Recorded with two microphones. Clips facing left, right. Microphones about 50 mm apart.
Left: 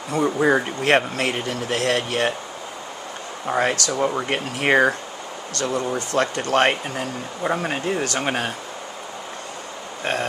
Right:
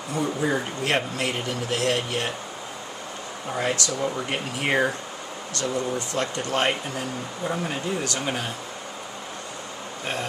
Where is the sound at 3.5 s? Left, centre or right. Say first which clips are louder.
Left 5 dB; left.